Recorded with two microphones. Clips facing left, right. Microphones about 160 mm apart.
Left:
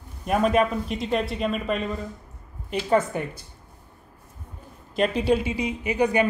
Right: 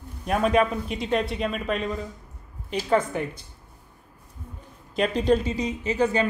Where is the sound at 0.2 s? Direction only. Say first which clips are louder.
Left 1 dB; centre (ahead or behind).